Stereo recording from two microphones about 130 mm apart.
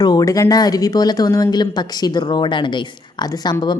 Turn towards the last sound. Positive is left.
turn(degrees=35)  # may be behind; listen again after turning